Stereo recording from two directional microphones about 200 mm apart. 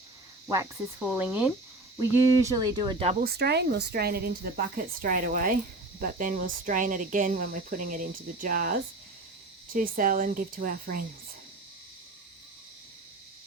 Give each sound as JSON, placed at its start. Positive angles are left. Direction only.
{"t": 0.5, "sound": "cricket", "side_deg": -15}
{"t": 3.0, "sound": "speech", "side_deg": -35}
{"t": 3.2, "sound": "speech", "side_deg": -55}